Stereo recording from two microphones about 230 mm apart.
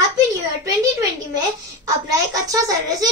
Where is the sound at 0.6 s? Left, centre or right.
Centre.